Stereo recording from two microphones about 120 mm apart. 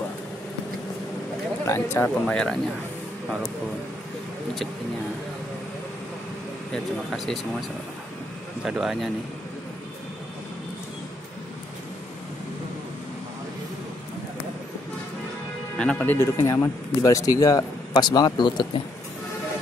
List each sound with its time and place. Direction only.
1.7 s speech: 20° left (ahead or behind)
2.2 s speech: 10° left (ahead or behind)
6.7 s speech: 5° left (ahead or behind)
8.6 s speech: 5° right (ahead or behind)
15.8 s speech: 10° left (ahead or behind)
17.0 s speech: 30° left (ahead or behind)